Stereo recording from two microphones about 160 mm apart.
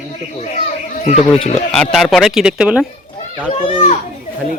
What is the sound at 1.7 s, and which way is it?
A man's voice, centre (ahead or behind).